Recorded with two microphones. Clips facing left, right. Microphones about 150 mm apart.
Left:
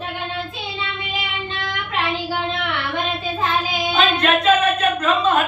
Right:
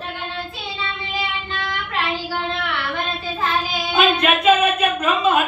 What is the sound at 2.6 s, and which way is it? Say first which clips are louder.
Child singing: left 1 dB; 20° left (ahead or behind).